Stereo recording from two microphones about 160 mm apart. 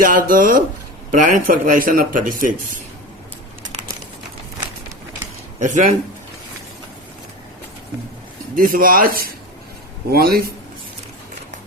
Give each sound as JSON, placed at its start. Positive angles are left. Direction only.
{"t": 0.0, "sound": "speech", "side_deg": -60}
{"t": 5.5, "sound": "speech", "side_deg": -50}
{"t": 8.5, "sound": "a man's voice", "side_deg": -60}